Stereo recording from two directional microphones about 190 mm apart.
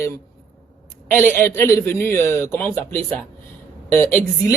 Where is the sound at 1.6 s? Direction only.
10° left (ahead or behind).